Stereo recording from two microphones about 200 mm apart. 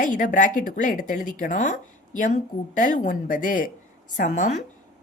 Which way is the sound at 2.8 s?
40° left (ahead or behind).